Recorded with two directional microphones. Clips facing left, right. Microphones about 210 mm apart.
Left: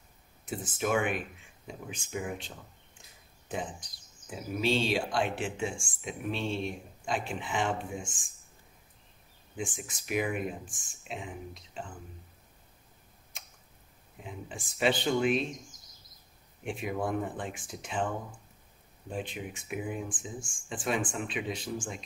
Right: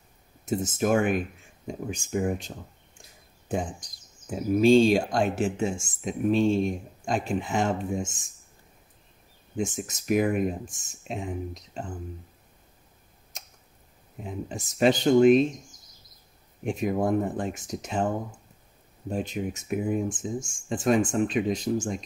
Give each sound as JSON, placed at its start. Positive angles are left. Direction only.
{"t": 0.5, "sound": "speech", "side_deg": -40}
{"t": 9.8, "sound": "speech", "side_deg": -40}
{"t": 14.2, "sound": "speech", "side_deg": -40}
{"t": 16.6, "sound": "speech", "side_deg": -40}